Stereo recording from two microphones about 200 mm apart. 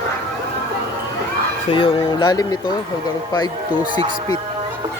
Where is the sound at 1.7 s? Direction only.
25° left (ahead or behind).